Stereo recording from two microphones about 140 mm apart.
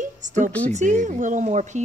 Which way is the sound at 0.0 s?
60° right (ahead or behind).